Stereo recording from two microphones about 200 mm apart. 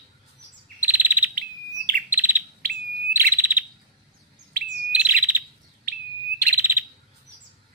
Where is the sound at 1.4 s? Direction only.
45° right (ahead or behind).